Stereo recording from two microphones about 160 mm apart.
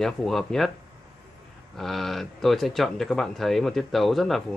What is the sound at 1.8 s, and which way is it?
Speech, centre (ahead or behind).